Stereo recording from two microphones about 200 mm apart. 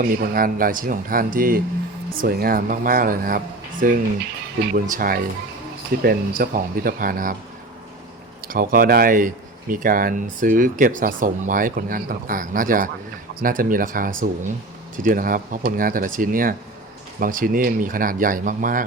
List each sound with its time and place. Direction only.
0.0 s speech: 45° right (ahead or behind)
8.4 s speech: 45° right (ahead or behind)